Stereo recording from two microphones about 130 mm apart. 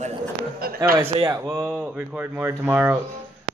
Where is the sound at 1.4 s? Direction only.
20° right (ahead or behind).